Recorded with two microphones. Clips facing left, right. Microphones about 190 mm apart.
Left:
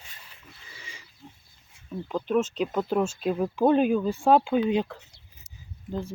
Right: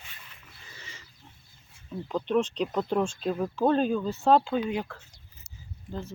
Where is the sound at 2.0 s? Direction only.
5° left (ahead or behind).